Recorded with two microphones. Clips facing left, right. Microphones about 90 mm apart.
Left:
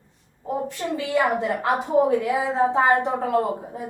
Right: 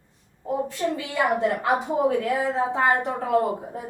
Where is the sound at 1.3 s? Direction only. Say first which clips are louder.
Right 1 dB; centre (ahead or behind).